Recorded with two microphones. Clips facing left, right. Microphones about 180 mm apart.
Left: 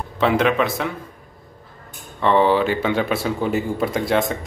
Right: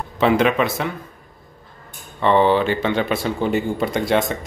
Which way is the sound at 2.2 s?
5° left (ahead or behind).